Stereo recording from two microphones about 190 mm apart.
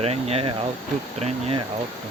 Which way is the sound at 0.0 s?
30° right (ahead or behind).